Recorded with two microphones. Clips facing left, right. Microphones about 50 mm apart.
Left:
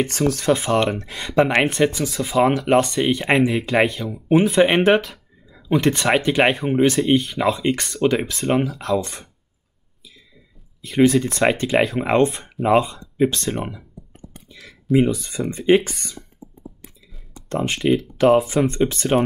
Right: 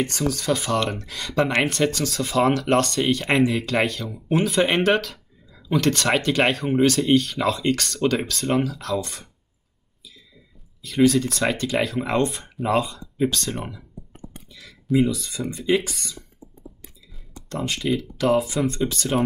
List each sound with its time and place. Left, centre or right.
0.1 s speech: left
0.5 s speech: left
9.0 s speech: centre
10.8 s speech: left
14.7 s a sound: centre
15.2 s speech: left
17.5 s speech: left